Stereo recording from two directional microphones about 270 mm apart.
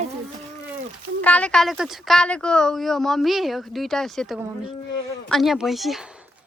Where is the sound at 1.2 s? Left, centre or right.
Centre.